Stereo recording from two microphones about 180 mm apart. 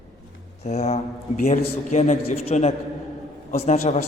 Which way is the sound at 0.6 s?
35° left (ahead or behind).